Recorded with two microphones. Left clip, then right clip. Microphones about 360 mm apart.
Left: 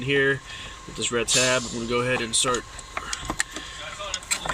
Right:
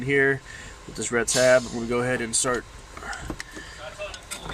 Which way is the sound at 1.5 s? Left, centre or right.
Centre.